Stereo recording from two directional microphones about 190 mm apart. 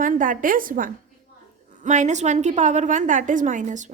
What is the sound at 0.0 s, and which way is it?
A woman's voice, 45° right (ahead or behind).